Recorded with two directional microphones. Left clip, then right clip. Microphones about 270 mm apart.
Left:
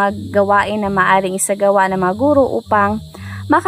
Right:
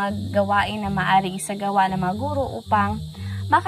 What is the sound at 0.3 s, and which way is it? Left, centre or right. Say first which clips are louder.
A woman's voice: left 6 dB; centre.